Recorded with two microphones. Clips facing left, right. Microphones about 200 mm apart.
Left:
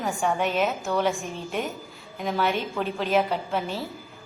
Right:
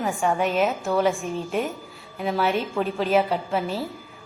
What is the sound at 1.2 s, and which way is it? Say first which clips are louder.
Speech: right 5 dB; 40° right (ahead or behind).